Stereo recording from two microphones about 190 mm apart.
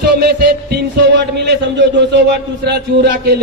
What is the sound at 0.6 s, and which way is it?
A man's voice, 60° right (ahead or behind).